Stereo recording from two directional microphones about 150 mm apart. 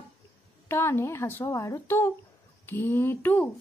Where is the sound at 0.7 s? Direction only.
15° left (ahead or behind).